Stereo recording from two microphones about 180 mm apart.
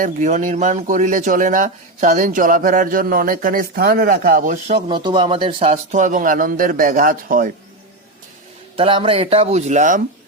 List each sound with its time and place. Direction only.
0.0 s speech: 45° right (ahead or behind)
4.9 s speech: 25° right (ahead or behind); by 7.5 s 50° right (ahead or behind)
8.7 s speech: 30° right (ahead or behind)